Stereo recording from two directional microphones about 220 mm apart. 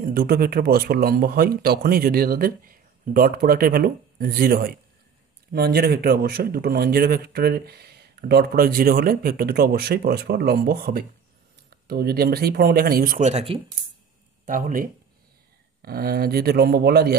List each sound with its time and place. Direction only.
0.0 s a man's voice: 40° right (ahead or behind)
14.4 s a man's voice: 40° right (ahead or behind)